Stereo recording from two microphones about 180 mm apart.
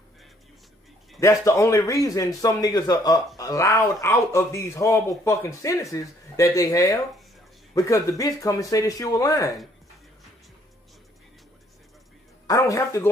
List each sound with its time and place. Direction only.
1.2 s a man's voice: 15° left (ahead or behind)
12.4 s a man's voice: 15° left (ahead or behind)